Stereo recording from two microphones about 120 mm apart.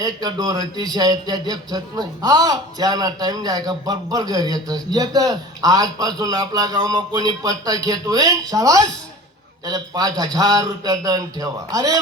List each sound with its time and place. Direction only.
0.0 s a man's voice: 30° right (ahead or behind)